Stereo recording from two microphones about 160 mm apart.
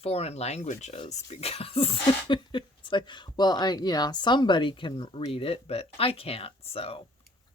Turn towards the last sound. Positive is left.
turn(degrees=35)  # may be behind; listen again after turning